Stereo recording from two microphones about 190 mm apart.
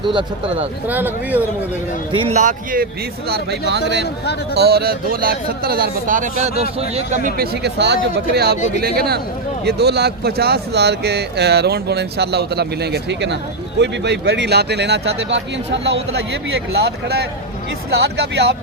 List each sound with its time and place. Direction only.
0.0 s speech: 25° right (ahead or behind)
0.9 s speech: 10° right (ahead or behind)
2.1 s speech: 30° right (ahead or behind)
2.4 s speech: 40° right (ahead or behind)
3.2 s speech: 55° right (ahead or behind)
3.7 s speech: 65° right (ahead or behind)